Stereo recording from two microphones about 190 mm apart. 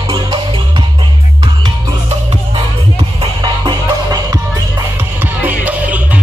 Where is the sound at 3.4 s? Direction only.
20° right (ahead or behind).